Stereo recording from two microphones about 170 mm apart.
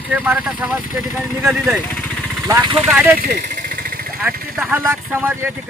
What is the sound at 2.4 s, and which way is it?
Speech, 20° right (ahead or behind).